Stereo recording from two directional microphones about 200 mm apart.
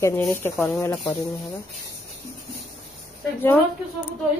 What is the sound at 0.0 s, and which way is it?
Speech, 15° left (ahead or behind).